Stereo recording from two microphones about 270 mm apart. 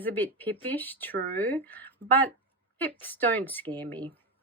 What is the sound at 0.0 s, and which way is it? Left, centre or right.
Speech, centre.